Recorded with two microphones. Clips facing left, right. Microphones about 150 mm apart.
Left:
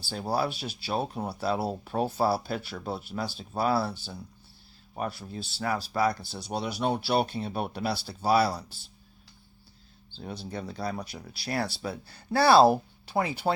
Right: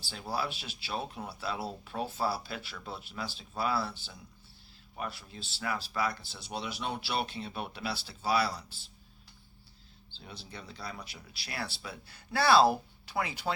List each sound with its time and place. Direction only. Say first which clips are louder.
0.0 s speech: left 7 dB; 40° left (ahead or behind)
10.1 s speech: left 10 dB; 45° left (ahead or behind)